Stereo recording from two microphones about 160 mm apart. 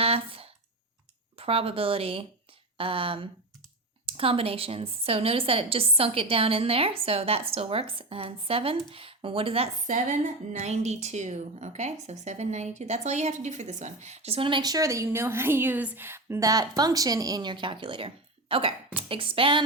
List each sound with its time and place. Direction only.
0.0 s a sound: 35° right (ahead or behind)
1.4 s a woman's voice: 35° right (ahead or behind)
9.8 s a woman's voice: 50° right (ahead or behind); by 19.6 s 30° right (ahead or behind)